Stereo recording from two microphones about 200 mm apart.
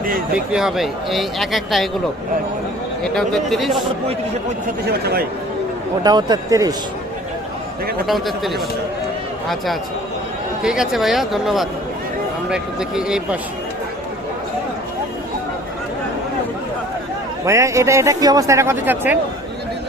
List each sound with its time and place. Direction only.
0.3 s speech: 5° right (ahead or behind)
3.0 s speech: centre (ahead or behind)
4.9 s speech: 55° right (ahead or behind)
6.0 s speech: 20° right (ahead or behind)
8.0 s speech: centre (ahead or behind)
10.6 s speech: 5° right (ahead or behind)
17.4 s a man's voice: 15° right (ahead or behind)